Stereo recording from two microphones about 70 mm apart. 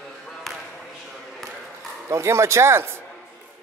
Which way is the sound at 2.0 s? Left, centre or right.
Right.